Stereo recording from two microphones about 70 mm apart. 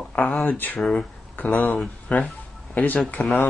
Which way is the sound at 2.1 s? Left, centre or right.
Left.